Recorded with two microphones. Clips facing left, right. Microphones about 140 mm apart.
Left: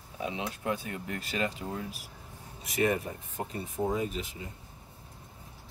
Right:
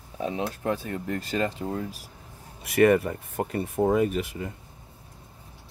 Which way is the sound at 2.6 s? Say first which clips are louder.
Right 9 dB; 65° right (ahead or behind).